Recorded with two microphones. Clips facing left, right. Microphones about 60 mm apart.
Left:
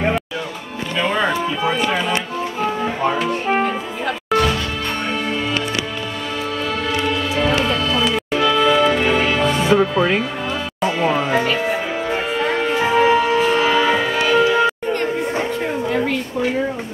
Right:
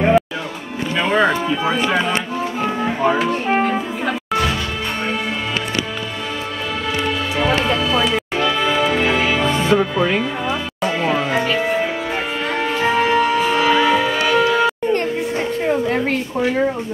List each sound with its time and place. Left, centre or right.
0.9 s music: centre
1.5 s music: centre
7.0 s music: centre
10.8 s speech: centre
12.7 s music: centre